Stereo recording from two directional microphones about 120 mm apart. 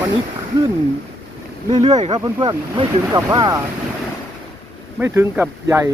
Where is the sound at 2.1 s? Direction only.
35° right (ahead or behind).